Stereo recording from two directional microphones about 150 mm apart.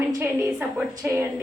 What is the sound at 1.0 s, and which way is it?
Speech, 20° right (ahead or behind).